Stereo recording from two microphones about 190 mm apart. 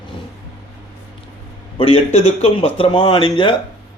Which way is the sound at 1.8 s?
30° left (ahead or behind).